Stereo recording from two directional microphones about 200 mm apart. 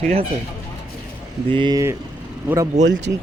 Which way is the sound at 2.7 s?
40° right (ahead or behind).